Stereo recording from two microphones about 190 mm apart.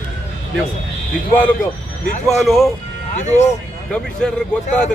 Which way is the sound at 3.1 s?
40° left (ahead or behind).